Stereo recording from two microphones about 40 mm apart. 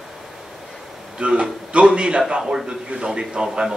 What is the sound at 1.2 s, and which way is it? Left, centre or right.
A man's voice, right.